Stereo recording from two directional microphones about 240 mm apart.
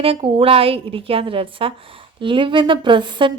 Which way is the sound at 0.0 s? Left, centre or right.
Right.